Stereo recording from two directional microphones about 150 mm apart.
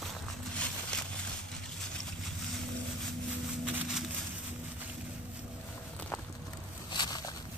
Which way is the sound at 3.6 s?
5° right (ahead or behind).